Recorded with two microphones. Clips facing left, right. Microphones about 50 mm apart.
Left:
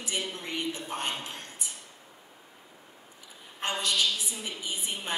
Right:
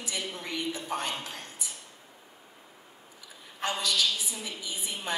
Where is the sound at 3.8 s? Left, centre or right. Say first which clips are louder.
Left 1 dB; left.